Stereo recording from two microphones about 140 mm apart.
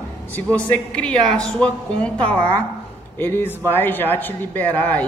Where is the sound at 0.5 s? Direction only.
10° left (ahead or behind).